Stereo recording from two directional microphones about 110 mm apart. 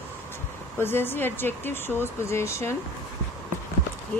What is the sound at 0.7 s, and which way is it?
Speech, 20° left (ahead or behind).